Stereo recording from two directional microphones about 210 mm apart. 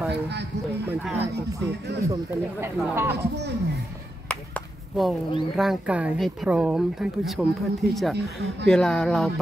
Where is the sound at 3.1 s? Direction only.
55° right (ahead or behind).